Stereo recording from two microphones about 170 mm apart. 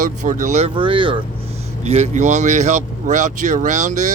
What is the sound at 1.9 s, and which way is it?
Speech, 40° right (ahead or behind).